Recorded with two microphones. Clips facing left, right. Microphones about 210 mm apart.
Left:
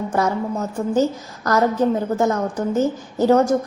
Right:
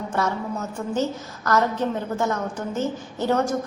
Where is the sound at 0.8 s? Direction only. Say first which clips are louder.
Left 8 dB; 30° left (ahead or behind).